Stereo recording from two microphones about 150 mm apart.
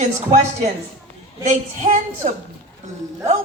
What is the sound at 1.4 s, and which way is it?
Speech, 55° right (ahead or behind).